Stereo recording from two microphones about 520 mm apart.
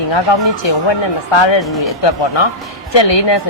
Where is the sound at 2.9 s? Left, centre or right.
Left.